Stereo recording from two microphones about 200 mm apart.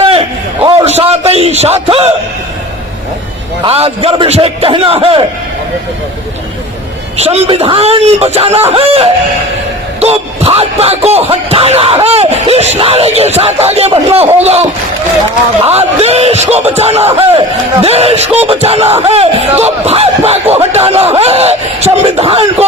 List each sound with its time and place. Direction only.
0.0 s a sound: 30° right (ahead or behind)
3.6 s a man's voice: 30° right (ahead or behind)
7.2 s speech: 30° right (ahead or behind)